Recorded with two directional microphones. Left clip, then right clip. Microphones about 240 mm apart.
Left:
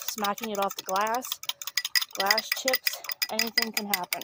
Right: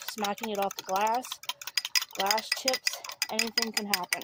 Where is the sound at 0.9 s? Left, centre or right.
Centre.